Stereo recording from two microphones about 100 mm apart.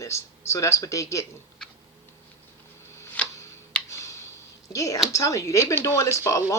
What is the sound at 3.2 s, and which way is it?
Tick-tock, 15° left (ahead or behind).